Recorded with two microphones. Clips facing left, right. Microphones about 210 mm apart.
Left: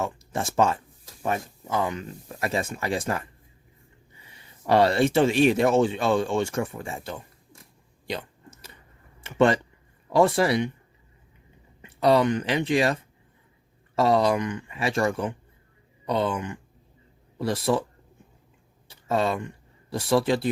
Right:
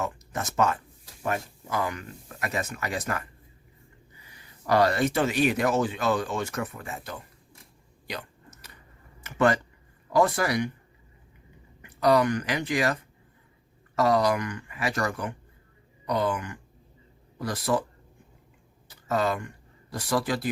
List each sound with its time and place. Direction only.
0.0 s speech: 30° left (ahead or behind)
4.3 s speech: 25° left (ahead or behind)
8.0 s a sound: 30° left (ahead or behind)
9.2 s speech: 25° left (ahead or behind)
11.8 s speech: 25° left (ahead or behind)
18.9 s speech: 25° left (ahead or behind)